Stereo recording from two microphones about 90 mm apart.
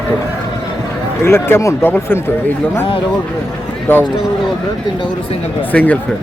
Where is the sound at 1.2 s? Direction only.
25° left (ahead or behind).